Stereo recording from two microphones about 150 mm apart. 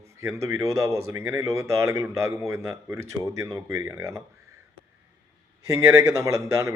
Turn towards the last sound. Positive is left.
turn(degrees=-20)  # may be behind; listen again after turning